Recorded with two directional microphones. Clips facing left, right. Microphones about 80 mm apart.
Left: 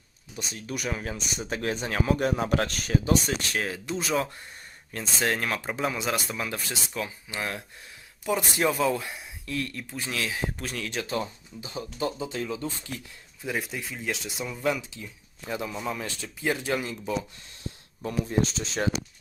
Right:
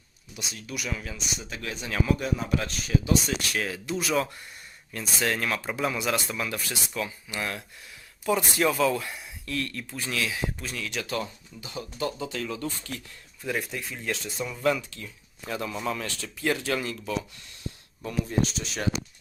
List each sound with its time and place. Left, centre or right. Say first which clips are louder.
0.3 s speech: left 2 dB; left
3.0 s speech: left 1 dB; left; by 16.0 s centre
16.0 s speech: right 1 dB; centre